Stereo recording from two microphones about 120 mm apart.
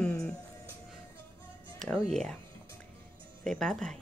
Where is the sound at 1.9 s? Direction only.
5° left (ahead or behind).